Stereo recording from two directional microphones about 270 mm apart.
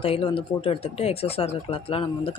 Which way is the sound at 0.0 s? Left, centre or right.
Centre.